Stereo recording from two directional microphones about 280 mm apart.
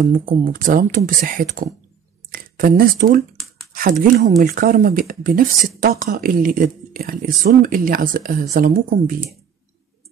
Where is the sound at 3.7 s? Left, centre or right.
Right.